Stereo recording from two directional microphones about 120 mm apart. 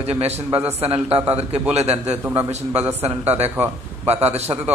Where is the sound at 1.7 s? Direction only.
60° right (ahead or behind).